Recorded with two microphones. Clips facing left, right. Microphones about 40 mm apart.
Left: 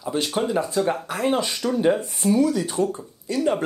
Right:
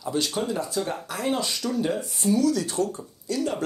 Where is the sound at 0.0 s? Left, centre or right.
Left.